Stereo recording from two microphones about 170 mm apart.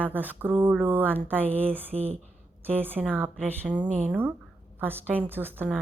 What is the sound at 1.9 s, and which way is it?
Speech, 35° right (ahead or behind).